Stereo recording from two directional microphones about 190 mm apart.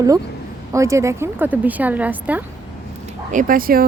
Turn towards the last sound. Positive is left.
turn(degrees=-50)  # may be behind; listen again after turning